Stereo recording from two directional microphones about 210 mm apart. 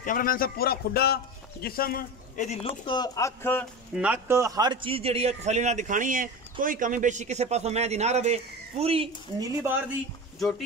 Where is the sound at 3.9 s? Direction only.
5° right (ahead or behind); by 9.0 s 30° right (ahead or behind).